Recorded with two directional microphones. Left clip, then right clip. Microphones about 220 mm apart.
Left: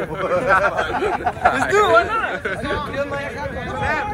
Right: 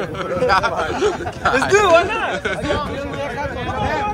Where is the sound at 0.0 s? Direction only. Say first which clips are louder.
Even; 10° right (ahead or behind).